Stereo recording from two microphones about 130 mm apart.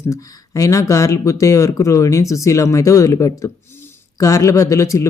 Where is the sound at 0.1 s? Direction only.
25° left (ahead or behind).